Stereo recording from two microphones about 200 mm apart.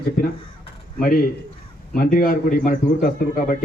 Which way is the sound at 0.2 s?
45° left (ahead or behind).